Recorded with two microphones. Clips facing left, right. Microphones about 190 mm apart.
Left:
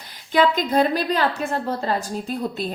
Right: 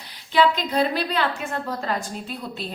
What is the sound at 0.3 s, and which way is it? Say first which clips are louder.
A woman's voice: left 2 dB; 45° left (ahead or behind).